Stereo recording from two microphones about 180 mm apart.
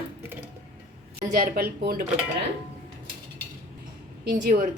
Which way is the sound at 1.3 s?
55° right (ahead or behind).